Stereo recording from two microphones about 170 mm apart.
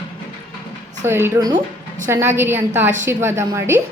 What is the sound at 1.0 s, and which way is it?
A woman's voice, 15° right (ahead or behind).